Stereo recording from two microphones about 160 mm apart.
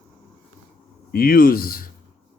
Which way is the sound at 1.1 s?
65° left (ahead or behind).